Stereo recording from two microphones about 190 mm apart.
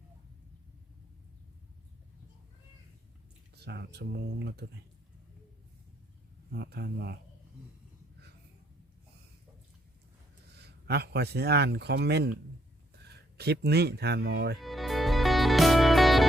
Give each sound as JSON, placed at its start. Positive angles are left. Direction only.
{"t": 3.5, "sound": "speech", "side_deg": -60}
{"t": 6.5, "sound": "speech", "side_deg": -60}
{"t": 10.6, "sound": "speech", "side_deg": -60}
{"t": 14.6, "sound": "music", "side_deg": 0}